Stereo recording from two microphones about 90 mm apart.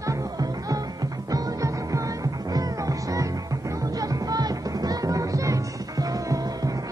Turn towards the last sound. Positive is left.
turn(degrees=-40)  # may be behind; listen again after turning